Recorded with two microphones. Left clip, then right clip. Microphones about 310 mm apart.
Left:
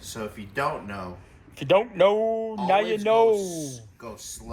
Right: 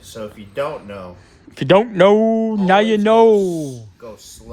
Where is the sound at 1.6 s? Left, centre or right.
Right.